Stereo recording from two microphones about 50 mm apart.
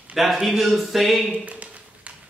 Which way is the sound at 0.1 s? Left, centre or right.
Centre.